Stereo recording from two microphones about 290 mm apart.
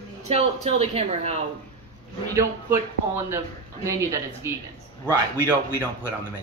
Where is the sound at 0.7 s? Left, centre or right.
Right.